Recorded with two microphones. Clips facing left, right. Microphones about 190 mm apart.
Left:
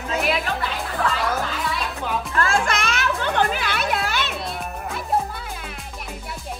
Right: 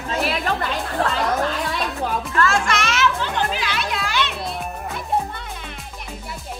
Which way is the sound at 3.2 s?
55° left (ahead or behind).